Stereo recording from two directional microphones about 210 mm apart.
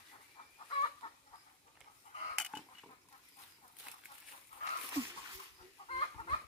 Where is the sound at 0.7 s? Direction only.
25° left (ahead or behind).